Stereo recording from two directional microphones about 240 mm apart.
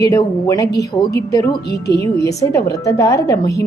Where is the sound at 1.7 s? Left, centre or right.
Left.